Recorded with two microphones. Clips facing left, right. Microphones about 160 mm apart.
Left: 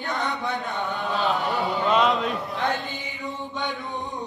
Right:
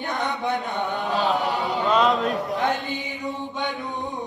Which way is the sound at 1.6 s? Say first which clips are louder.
Left 1 dB; centre (ahead or behind).